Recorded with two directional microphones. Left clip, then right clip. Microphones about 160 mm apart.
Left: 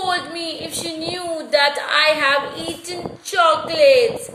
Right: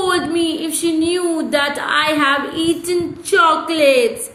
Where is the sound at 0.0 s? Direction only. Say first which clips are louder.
Right 5 dB; 15° right (ahead or behind).